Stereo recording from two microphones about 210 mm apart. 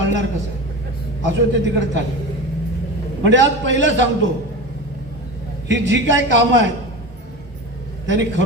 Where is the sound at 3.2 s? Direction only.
60° right (ahead or behind).